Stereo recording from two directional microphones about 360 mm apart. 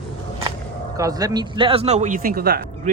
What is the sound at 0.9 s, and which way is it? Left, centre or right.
A man's voice, centre.